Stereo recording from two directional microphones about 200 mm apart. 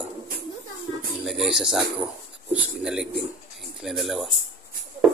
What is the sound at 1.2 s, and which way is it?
Speech, centre (ahead or behind).